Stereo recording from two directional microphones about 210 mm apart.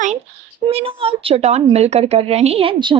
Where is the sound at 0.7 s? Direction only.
25° right (ahead or behind).